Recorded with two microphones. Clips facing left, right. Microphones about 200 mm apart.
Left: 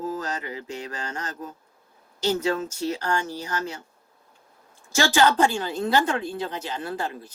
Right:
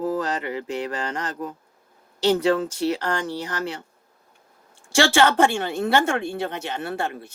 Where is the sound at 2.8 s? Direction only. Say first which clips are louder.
Right 2 dB; 90° right.